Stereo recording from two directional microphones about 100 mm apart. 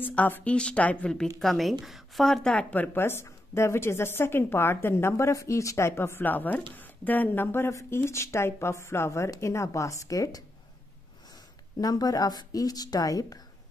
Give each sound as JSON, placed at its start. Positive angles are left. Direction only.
{"t": 0.0, "sound": "a woman's voice", "side_deg": 15}
{"t": 11.8, "sound": "a woman's voice", "side_deg": 40}